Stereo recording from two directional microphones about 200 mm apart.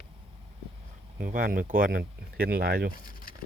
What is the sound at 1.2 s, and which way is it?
Speech, 45° right (ahead or behind).